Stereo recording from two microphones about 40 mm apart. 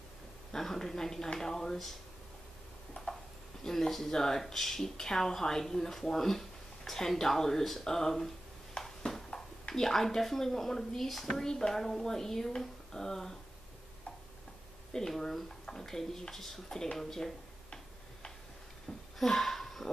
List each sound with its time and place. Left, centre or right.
0.5 s speech: centre
3.6 s speech: centre
8.7 s a sound: centre
11.2 s speech: centre
14.9 s speech: centre
18.9 s a sound: left
19.2 s speech: centre